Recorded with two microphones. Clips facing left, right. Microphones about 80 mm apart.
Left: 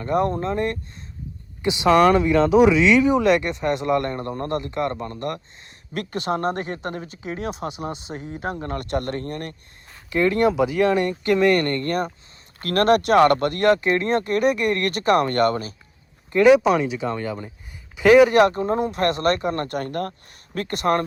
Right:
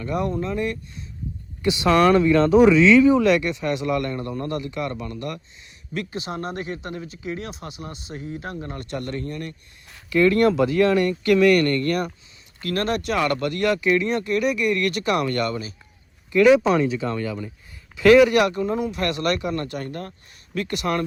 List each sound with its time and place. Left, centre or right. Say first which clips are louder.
0.0 s speech: left 3 dB; left
1.6 s speech: left 2 dB; left
2.9 s speech: right 2 dB; centre; by 5.4 s left
5.9 s speech: left 4 dB; left
7.5 s speech: left 7 dB; centre
8.6 s speech: left 5 dB; left
10.1 s speech: right 2 dB; left
12.5 s speech: left 6 dB; left
16.6 s speech: even; centre
18.3 s speech: left 3 dB; left